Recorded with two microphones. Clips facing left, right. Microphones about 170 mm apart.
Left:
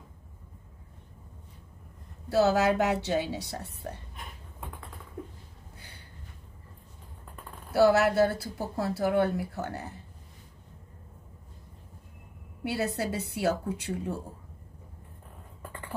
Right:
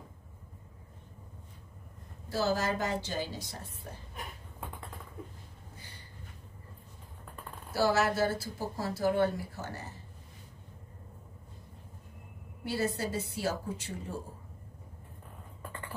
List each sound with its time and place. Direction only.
2.2 s a woman's voice: 65° left (ahead or behind)
5.8 s a sound: 65° left (ahead or behind)
7.7 s speech: 60° left (ahead or behind)
12.6 s speech: 65° left (ahead or behind)